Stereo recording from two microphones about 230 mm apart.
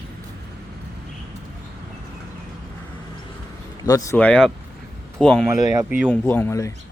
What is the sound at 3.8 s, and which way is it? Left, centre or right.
Speech, centre.